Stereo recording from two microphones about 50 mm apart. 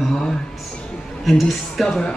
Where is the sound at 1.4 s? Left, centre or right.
Centre.